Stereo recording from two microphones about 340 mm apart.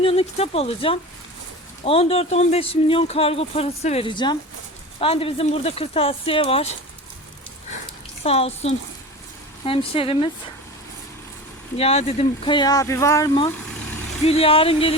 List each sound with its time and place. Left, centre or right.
0.0 s speech: centre
8.2 s speech: centre
11.8 s speech: centre